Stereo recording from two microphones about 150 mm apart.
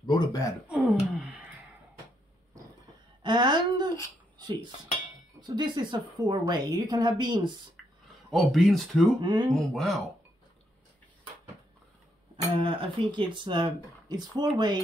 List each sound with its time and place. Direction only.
0.0 s speech: 25° left (ahead or behind)
0.7 s speech: 5° right (ahead or behind)
3.2 s a sound: 30° right (ahead or behind)
5.5 s a woman's voice: 30° right (ahead or behind)
8.3 s speech: centre (ahead or behind)
9.2 s a woman's voice: 30° right (ahead or behind)
9.5 s speech: 5° left (ahead or behind)
12.5 s speech: 35° right (ahead or behind)